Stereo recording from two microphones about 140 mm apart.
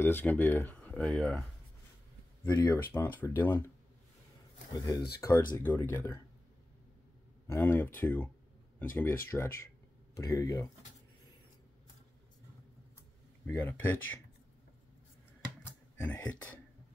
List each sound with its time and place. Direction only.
0.0 s speech: 15° left (ahead or behind)
2.5 s speech: 20° left (ahead or behind)
4.7 s speech: 25° left (ahead or behind)
7.4 s speech: 15° left (ahead or behind)
13.5 s speech: 15° left (ahead or behind)
16.0 s speech: 10° left (ahead or behind)